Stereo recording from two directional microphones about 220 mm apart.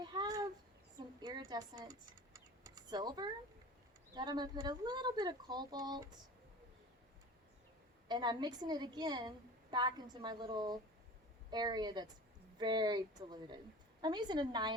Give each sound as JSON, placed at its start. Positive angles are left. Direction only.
{"t": 0.0, "sound": "a sound", "side_deg": -20}
{"t": 0.9, "sound": "speech", "side_deg": -15}
{"t": 8.0, "sound": "speech", "side_deg": -20}